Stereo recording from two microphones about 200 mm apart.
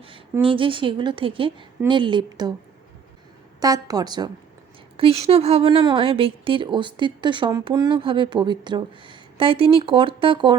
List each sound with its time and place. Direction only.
0.4 s speech: 25° right (ahead or behind)
3.6 s speech: 20° right (ahead or behind)